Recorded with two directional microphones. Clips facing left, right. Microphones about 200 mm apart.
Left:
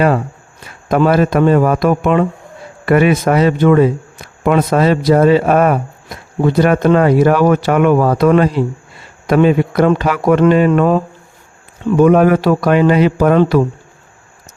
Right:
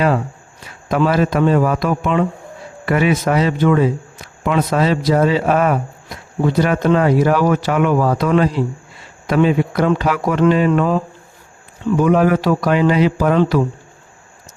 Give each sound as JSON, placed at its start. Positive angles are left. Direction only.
{"t": 0.9, "sound": "a man's voice", "side_deg": 50}
{"t": 11.9, "sound": "speech", "side_deg": 55}